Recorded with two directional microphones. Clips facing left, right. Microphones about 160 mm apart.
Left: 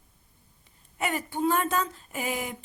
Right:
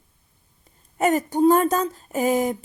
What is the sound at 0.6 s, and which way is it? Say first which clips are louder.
Speech: right 10 dB; 45° right (ahead or behind).